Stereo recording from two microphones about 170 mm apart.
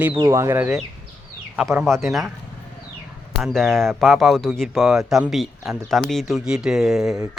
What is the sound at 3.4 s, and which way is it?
Speech, centre (ahead or behind).